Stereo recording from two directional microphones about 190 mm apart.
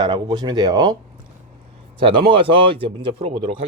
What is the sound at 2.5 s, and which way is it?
Speech, 30° right (ahead or behind).